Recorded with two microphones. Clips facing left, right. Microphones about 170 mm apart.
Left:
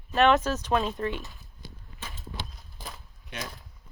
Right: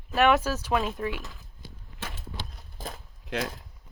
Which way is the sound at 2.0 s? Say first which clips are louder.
Right 4 dB; 70° right (ahead or behind).